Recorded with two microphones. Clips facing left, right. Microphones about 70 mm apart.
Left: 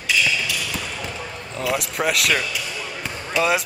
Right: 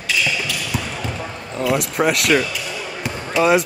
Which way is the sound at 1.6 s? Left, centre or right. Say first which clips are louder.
Right 5 dB; centre.